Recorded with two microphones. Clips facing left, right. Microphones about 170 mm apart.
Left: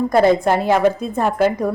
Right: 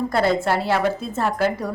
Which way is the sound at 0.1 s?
20° left (ahead or behind).